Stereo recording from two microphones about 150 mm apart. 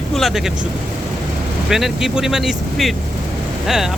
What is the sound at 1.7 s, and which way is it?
Speech, centre (ahead or behind).